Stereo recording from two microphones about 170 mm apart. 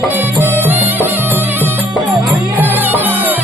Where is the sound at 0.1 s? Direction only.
10° right (ahead or behind).